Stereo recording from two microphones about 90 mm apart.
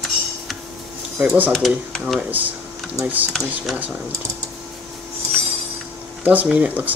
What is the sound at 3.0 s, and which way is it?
Speech, 20° right (ahead or behind).